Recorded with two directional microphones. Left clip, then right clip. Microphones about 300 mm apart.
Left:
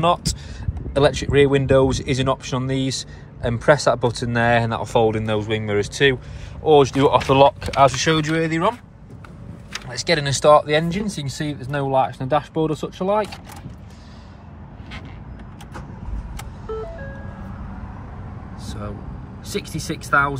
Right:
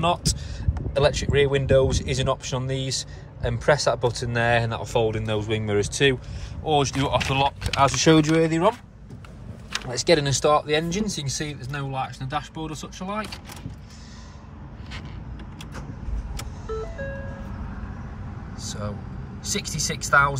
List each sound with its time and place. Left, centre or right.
0.0 s speech: centre
7.9 s speech: centre
9.8 s speech: centre
18.6 s vehicle: centre
19.4 s speech: centre